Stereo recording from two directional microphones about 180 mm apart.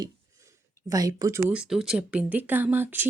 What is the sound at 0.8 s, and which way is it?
Speech, 20° right (ahead or behind).